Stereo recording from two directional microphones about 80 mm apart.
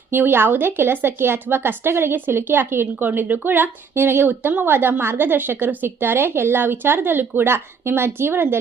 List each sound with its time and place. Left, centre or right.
0.1 s a woman's voice: right